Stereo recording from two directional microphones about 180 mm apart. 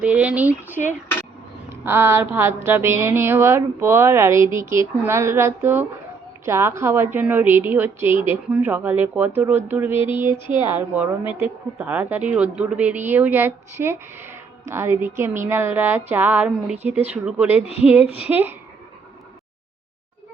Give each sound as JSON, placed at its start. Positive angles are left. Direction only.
{"t": 0.0, "sound": "speech", "side_deg": -10}
{"t": 17.7, "sound": "speech", "side_deg": 35}
{"t": 18.3, "sound": "speech", "side_deg": -10}